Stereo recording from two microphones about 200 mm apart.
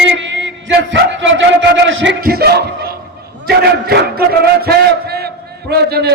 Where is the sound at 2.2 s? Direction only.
50° right (ahead or behind).